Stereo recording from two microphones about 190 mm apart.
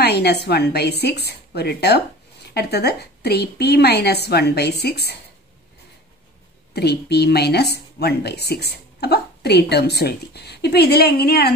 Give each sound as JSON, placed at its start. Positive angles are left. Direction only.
{"t": 0.0, "sound": "a woman's voice", "side_deg": 60}
{"t": 6.7, "sound": "a woman's voice", "side_deg": 60}